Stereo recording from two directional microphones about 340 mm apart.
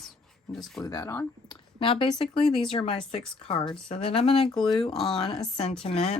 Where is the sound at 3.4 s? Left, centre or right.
Centre.